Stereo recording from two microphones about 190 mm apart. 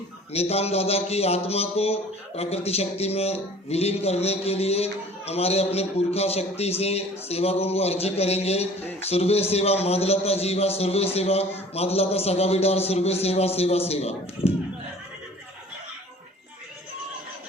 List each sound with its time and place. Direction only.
0.3 s speech: 35° left (ahead or behind)